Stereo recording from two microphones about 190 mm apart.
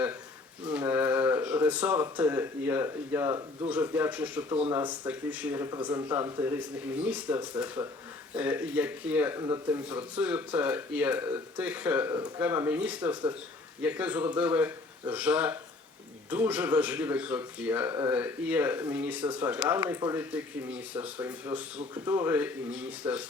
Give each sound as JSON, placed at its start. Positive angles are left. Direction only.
{"t": 0.6, "sound": "speech", "side_deg": -10}